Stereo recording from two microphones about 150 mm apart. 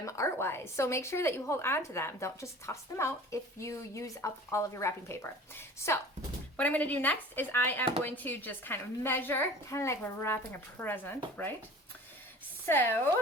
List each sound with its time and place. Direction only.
0.0 s a woman's voice: 20° left (ahead or behind)
12.6 s a woman's voice: 15° left (ahead or behind)